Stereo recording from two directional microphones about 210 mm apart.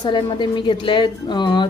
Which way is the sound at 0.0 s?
20° left (ahead or behind).